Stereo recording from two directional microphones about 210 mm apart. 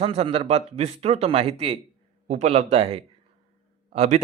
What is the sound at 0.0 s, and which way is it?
A man's voice, 30° right (ahead or behind).